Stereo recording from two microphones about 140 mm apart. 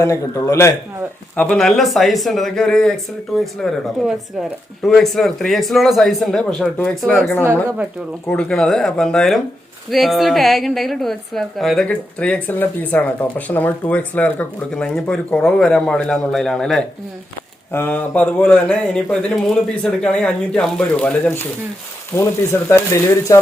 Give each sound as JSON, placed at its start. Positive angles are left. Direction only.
{"t": 0.0, "sound": "a man's voice", "side_deg": 20}
{"t": 1.4, "sound": "a woman's voice", "side_deg": 5}
{"t": 17.7, "sound": "a man's voice", "side_deg": 15}